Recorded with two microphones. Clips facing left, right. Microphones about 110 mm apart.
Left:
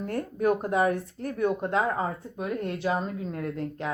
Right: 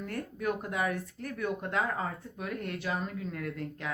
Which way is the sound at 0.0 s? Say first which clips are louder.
Left 7 dB; 35° left (ahead or behind).